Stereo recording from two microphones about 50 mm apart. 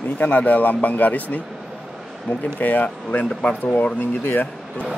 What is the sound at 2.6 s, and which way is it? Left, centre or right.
Speech, left.